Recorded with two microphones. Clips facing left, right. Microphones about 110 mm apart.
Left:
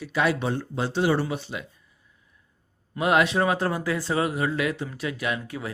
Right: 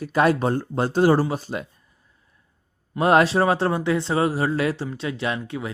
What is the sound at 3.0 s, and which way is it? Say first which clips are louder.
Speech: right 4 dB; 35° right (ahead or behind).